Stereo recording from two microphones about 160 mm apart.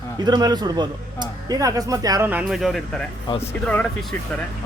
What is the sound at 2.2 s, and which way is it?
Speech, 5° right (ahead or behind).